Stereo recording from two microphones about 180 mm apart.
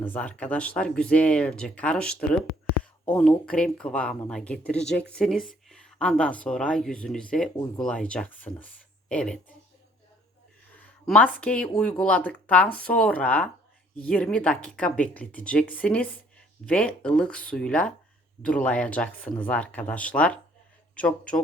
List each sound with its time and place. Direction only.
0.0 s speech: 10° left (ahead or behind)
10.8 s speech: 5° left (ahead or behind)